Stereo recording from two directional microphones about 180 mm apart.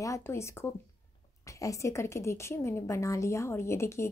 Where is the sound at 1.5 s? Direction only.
15° left (ahead or behind).